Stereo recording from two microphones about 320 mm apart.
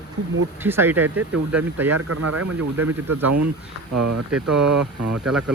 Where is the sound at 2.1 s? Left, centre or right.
Right.